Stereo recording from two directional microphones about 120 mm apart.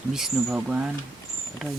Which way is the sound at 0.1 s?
5° right (ahead or behind).